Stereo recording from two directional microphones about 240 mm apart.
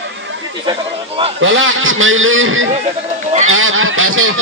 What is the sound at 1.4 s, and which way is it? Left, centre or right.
A man's voice, right.